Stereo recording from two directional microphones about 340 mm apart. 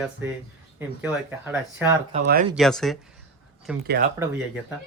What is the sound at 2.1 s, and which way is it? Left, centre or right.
Speech, right.